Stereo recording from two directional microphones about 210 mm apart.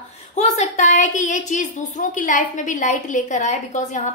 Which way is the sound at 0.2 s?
35° left (ahead or behind).